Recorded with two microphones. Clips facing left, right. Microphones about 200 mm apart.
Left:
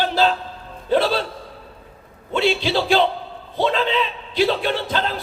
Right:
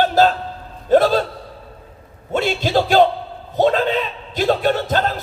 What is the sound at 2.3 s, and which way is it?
Speech, 45° right (ahead or behind).